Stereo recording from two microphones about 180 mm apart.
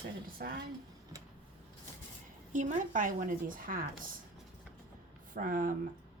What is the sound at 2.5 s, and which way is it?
A woman's voice, 45° right (ahead or behind).